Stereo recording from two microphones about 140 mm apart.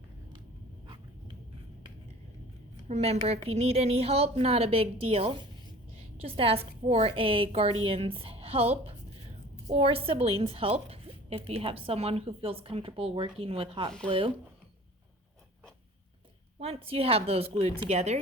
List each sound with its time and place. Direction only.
2.9 s speech: 50° right (ahead or behind)
16.6 s speech: 45° right (ahead or behind)